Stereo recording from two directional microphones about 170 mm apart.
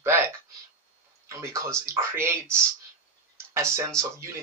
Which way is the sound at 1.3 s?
15° right (ahead or behind).